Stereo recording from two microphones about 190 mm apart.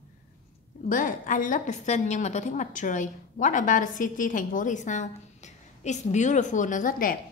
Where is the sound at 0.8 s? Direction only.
45° left (ahead or behind).